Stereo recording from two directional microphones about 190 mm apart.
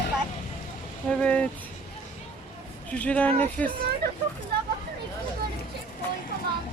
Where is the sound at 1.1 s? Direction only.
5° left (ahead or behind).